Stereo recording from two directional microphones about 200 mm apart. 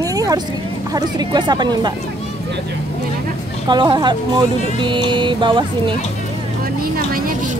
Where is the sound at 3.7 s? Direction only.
20° right (ahead or behind).